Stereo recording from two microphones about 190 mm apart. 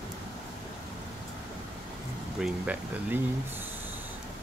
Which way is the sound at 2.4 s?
10° right (ahead or behind).